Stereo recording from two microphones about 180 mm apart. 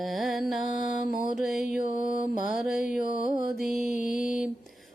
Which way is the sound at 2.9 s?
45° left (ahead or behind).